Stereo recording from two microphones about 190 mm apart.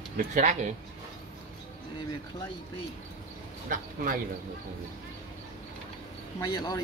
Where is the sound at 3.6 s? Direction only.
45° right (ahead or behind).